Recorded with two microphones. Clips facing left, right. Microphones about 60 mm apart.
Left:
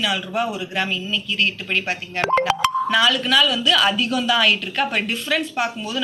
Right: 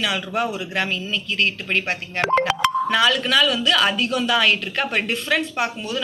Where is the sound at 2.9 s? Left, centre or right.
Right.